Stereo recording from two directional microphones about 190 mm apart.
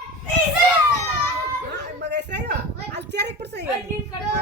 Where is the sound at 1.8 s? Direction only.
65° right (ahead or behind).